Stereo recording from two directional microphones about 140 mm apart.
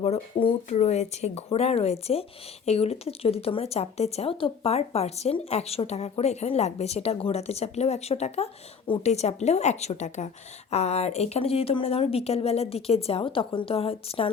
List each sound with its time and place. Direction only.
0.0 s speech: 45° left (ahead or behind)